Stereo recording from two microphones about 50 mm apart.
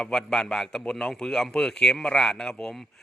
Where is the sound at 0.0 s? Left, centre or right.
Centre.